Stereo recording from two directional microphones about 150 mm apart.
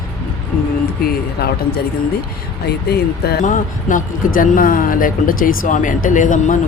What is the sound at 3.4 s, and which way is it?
Speech, 60° left (ahead or behind).